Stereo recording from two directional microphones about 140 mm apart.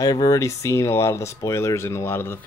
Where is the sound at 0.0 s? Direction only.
25° left (ahead or behind).